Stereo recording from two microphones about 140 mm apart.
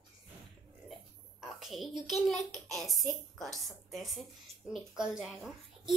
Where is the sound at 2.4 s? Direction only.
25° right (ahead or behind).